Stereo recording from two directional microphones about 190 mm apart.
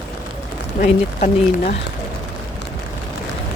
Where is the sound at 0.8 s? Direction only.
40° left (ahead or behind).